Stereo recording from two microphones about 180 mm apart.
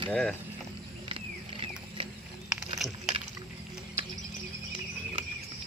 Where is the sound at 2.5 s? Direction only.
Centre (ahead or behind).